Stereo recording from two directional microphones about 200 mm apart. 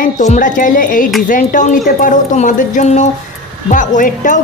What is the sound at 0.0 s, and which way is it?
Speech, 40° left (ahead or behind).